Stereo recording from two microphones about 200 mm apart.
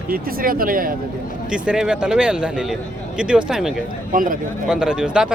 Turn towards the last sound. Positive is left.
turn(degrees=-5)  # may be behind; listen again after turning